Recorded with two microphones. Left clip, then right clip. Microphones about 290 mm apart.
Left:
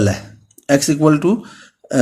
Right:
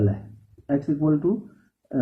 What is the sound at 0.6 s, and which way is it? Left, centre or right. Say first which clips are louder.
Speech: left 10 dB; left.